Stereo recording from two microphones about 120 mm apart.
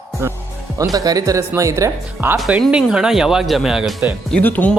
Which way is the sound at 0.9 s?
30° right (ahead or behind).